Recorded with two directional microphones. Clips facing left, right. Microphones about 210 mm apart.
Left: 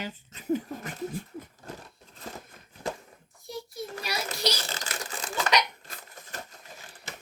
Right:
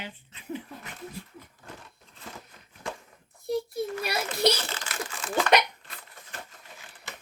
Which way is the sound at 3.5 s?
55° right (ahead or behind).